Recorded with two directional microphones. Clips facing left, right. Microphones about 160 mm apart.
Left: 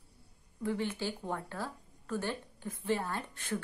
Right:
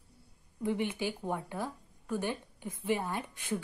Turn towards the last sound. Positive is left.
turn(degrees=-15)  # may be behind; listen again after turning